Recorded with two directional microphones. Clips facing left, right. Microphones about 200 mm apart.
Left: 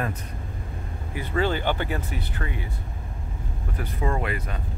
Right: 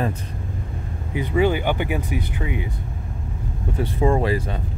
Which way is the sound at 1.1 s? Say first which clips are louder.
Right 6 dB; 15° right (ahead or behind).